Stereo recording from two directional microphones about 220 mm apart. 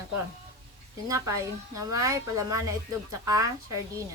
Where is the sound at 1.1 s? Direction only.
15° right (ahead or behind).